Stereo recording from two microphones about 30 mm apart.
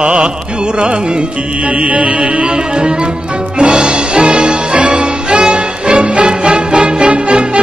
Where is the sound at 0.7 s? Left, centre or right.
Right.